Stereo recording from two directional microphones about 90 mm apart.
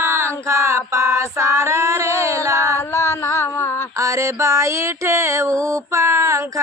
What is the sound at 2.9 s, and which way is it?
Mantra, 30° left (ahead or behind).